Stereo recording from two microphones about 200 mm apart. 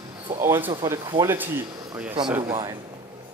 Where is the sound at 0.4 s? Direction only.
10° right (ahead or behind).